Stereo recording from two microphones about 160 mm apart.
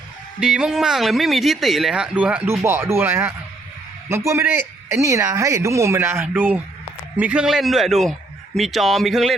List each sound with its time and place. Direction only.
0.3 s speech: 5° right (ahead or behind)